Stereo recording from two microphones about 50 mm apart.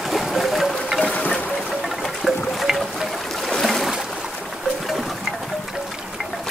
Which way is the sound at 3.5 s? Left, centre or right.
Centre.